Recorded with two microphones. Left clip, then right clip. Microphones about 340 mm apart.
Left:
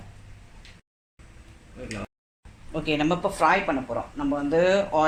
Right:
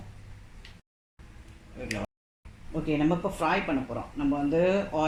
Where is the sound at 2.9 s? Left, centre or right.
Left.